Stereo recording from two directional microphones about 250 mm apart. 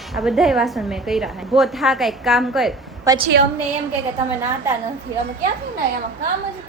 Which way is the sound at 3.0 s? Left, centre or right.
Centre.